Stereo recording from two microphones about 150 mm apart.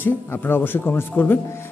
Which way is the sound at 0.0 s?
15° left (ahead or behind).